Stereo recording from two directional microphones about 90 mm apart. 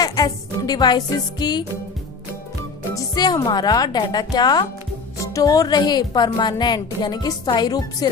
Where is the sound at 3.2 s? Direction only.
55° left (ahead or behind).